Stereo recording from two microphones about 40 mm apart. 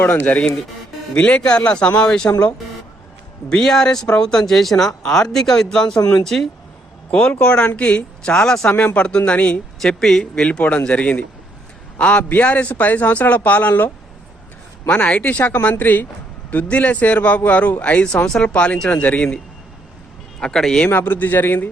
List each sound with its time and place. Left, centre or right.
0.0 s a man's voice: left; by 2.3 s centre
3.5 s speech: centre
7.1 s a man's voice: left
8.2 s speech: centre
8.7 s speech: left
9.0 s a man's voice: left
9.8 s speech: centre
10.7 s a man's voice: left
14.8 s a man's voice: left
16.6 s a man's voice: left
20.4 s speech: left
20.9 s a man's voice: left